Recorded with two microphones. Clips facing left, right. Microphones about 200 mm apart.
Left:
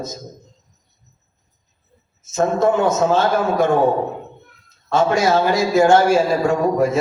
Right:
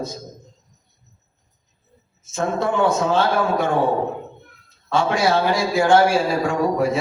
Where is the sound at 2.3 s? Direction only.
45° left (ahead or behind).